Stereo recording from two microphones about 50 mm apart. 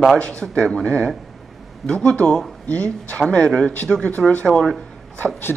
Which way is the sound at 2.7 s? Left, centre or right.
Left.